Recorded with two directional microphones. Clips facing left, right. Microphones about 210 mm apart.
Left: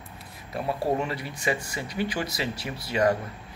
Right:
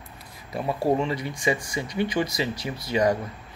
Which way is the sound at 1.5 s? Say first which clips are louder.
Right 2 dB; 20° right (ahead or behind).